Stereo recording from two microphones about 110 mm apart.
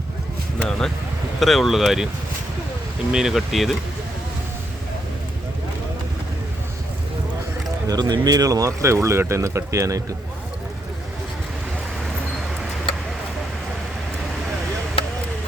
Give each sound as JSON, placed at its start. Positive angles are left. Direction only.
{"t": 0.6, "sound": "speech", "side_deg": 5}
{"t": 3.1, "sound": "speech", "side_deg": -5}
{"t": 7.9, "sound": "speech", "side_deg": -35}